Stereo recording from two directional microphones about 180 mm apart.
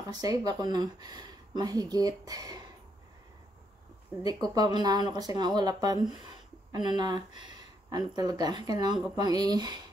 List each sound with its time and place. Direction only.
0.1 s speech: 20° right (ahead or behind)
4.2 s speech: 20° right (ahead or behind)